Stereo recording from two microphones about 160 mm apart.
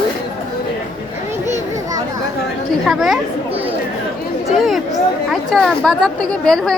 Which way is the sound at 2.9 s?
Centre (ahead or behind).